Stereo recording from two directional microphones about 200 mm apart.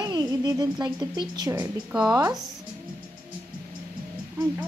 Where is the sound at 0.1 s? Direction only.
20° right (ahead or behind).